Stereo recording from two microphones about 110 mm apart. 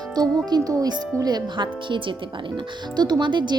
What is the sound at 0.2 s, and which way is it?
A woman's voice, 35° right (ahead or behind).